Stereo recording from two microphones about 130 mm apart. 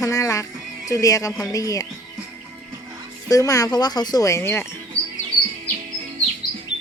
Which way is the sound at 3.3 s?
25° left (ahead or behind).